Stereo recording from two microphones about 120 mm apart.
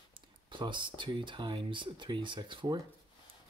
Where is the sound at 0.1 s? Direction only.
40° right (ahead or behind).